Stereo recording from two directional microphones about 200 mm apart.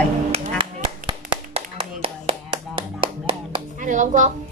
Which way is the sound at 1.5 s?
30° right (ahead or behind).